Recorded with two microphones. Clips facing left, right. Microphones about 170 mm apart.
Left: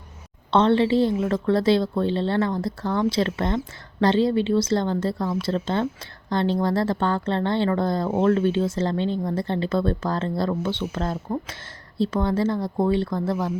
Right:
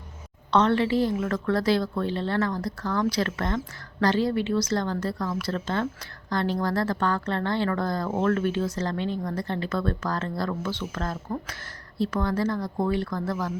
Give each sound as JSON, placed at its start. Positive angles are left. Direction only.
{"t": 0.5, "sound": "a woman's voice", "side_deg": 30}